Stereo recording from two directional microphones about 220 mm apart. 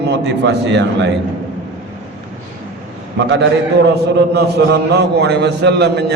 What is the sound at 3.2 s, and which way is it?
A man's voice, 50° right (ahead or behind).